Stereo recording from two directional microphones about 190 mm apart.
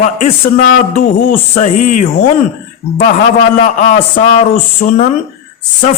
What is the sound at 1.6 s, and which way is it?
Speech, 40° left (ahead or behind).